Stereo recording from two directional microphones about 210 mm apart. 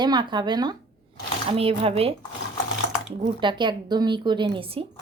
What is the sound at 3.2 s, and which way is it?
A woman's voice, 20° right (ahead or behind).